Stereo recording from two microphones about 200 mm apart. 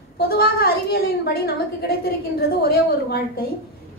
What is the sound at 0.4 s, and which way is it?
A woman's voice, 50° left (ahead or behind).